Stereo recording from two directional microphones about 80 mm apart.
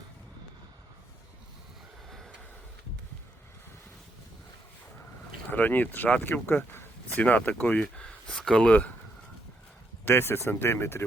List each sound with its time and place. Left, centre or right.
2.0 s vehicle: centre
5.5 s speech: left
10.1 s speech: left